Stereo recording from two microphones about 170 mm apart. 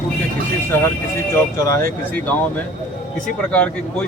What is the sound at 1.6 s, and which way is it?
Speech, 15° left (ahead or behind).